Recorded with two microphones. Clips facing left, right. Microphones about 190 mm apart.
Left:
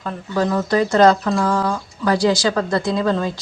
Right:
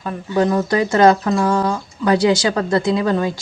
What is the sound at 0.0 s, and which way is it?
A woman's voice, 15° right (ahead or behind).